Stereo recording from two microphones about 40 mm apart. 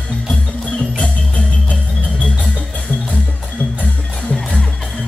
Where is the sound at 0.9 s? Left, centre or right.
Left.